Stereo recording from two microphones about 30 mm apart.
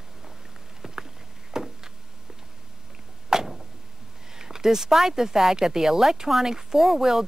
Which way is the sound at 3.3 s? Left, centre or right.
Right.